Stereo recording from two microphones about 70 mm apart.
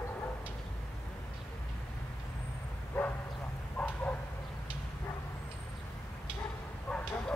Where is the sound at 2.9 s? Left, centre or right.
Left.